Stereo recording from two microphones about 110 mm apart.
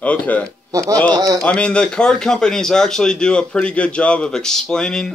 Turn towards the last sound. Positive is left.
turn(degrees=5)  # may be behind; listen again after turning